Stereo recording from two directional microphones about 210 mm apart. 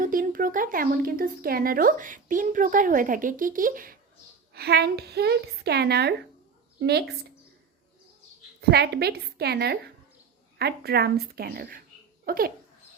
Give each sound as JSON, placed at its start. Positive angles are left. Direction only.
{"t": 0.0, "sound": "a woman's voice", "side_deg": -40}
{"t": 8.7, "sound": "a woman's voice", "side_deg": -50}